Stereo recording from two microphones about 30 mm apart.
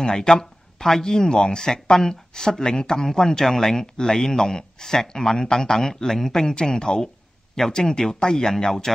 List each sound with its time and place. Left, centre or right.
0.0 s speech: left
0.3 s a sound: centre
1.0 s speech: centre